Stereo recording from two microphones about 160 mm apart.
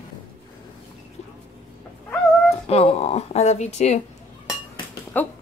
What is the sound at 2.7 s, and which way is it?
A woman's voice, 40° left (ahead or behind).